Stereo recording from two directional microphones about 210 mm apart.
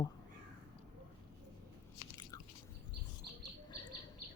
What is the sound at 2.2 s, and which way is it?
Biting, 20° left (ahead or behind).